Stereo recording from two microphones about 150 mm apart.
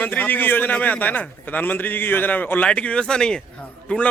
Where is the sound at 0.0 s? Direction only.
10° left (ahead or behind).